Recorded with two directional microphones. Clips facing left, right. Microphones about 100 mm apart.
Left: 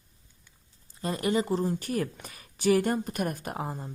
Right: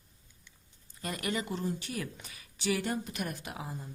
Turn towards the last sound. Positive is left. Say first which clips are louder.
# left 7 dB
turn(degrees=50)  # may be behind; listen again after turning